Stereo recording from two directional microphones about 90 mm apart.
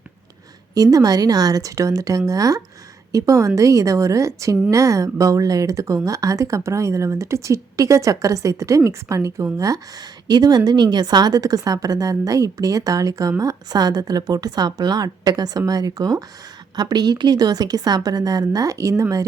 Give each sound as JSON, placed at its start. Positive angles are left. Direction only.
{"t": 0.7, "sound": "a woman's voice", "side_deg": -40}